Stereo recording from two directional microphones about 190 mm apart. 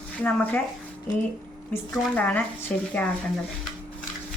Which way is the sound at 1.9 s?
5° left (ahead or behind).